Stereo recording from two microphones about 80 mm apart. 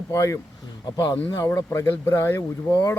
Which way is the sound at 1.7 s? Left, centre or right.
Left.